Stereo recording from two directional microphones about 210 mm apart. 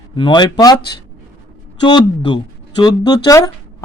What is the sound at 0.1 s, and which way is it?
Speech, 20° left (ahead or behind).